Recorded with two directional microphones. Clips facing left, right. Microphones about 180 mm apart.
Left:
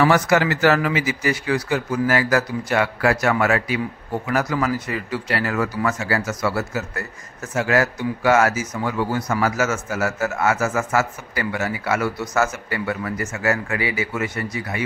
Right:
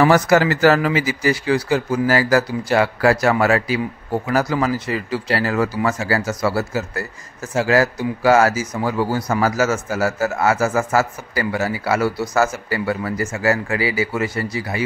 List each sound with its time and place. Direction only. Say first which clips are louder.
0.0 s speech: right 3 dB; 40° right (ahead or behind)